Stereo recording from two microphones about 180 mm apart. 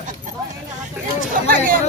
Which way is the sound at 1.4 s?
50° right (ahead or behind).